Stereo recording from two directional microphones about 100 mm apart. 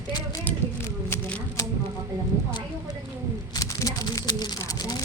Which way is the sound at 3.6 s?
40° left (ahead or behind).